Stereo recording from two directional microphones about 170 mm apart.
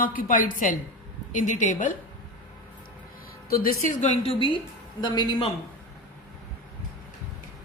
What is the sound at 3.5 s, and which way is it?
A woman's voice, 60° left (ahead or behind).